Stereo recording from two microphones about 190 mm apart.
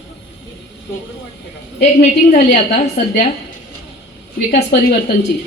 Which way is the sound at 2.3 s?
50° left (ahead or behind).